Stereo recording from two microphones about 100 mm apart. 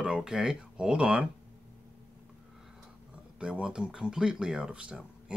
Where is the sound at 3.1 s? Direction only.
10° right (ahead or behind).